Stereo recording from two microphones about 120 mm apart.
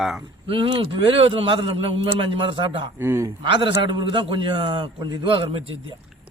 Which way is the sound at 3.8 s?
40° right (ahead or behind).